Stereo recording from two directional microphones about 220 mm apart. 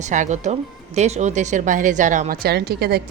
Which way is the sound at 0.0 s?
35° right (ahead or behind).